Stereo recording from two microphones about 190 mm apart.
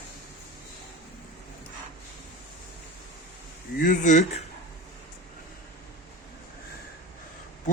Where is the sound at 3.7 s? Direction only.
45° left (ahead or behind).